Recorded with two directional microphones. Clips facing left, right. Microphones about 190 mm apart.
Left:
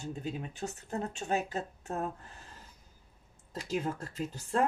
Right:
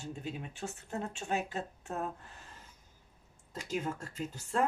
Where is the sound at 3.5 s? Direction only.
35° left (ahead or behind).